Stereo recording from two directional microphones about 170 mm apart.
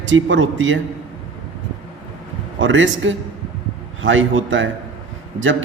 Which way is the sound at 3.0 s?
90° right.